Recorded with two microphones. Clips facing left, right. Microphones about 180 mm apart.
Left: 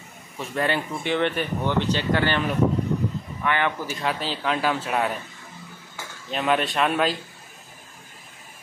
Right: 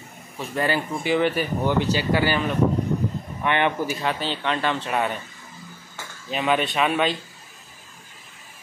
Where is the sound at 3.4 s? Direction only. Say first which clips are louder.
Right 3 dB; 20° right (ahead or behind).